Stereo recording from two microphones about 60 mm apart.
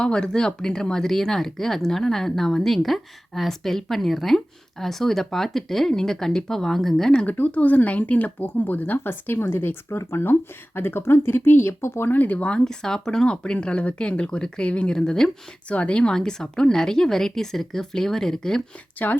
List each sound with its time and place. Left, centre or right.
0.0 s speech: centre
7.3 s speech: left
12.5 s a woman's voice: centre
19.0 s speech: left